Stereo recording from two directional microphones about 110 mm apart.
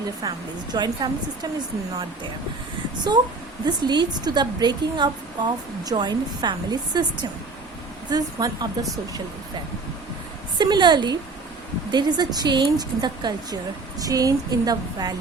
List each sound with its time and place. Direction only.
0.2 s a woman's voice: 40° right (ahead or behind)
3.1 s a woman's voice: 40° right (ahead or behind)
10.6 s a woman's voice: 40° right (ahead or behind)